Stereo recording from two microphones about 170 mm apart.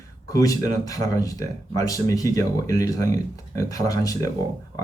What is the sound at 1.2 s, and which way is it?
Speech, 20° left (ahead or behind).